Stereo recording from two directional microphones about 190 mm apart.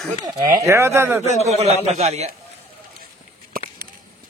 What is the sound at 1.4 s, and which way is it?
Speech, 35° right (ahead or behind).